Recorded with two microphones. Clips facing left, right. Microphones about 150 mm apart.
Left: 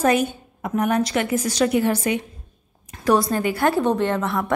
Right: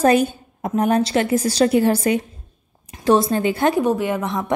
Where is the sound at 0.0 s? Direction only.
35° right (ahead or behind).